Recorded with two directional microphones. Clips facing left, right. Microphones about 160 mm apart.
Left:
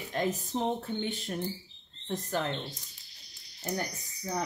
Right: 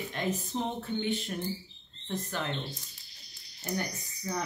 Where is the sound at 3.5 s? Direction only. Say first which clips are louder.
Even; 35° left (ahead or behind).